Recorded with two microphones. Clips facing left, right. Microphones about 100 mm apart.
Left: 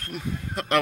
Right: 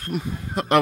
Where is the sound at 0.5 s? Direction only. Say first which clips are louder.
Right 5 dB; 20° right (ahead or behind).